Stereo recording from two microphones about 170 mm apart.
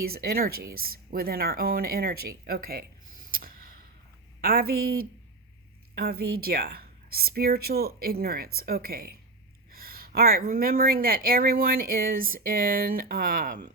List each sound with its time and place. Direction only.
0.0 s speech: 65° right (ahead or behind)
3.3 s a sound: 55° right (ahead or behind)
4.4 s speech: 60° right (ahead or behind)